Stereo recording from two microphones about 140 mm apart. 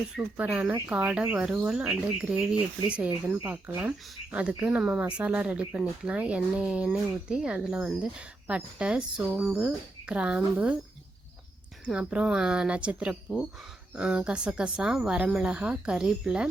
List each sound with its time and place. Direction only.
0.2 s speech: 10° right (ahead or behind)
11.9 s speech: 5° right (ahead or behind)